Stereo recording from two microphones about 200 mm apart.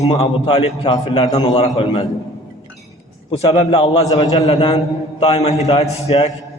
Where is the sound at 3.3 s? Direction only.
25° left (ahead or behind).